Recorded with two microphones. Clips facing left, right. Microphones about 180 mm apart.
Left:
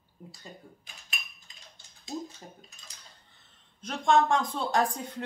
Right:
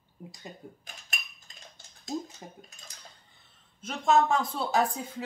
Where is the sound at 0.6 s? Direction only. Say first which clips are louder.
Right 5 dB; 20° right (ahead or behind).